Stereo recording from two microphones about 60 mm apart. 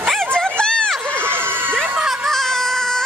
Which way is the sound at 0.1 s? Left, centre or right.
Centre.